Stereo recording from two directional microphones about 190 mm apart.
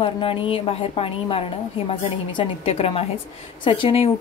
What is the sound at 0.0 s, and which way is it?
A woman's voice, 30° left (ahead or behind).